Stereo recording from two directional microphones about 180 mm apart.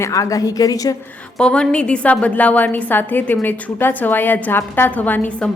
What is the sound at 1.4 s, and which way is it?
A woman's voice, 5° left (ahead or behind).